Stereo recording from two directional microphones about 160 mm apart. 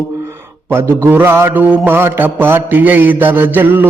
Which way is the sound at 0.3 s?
15° right (ahead or behind).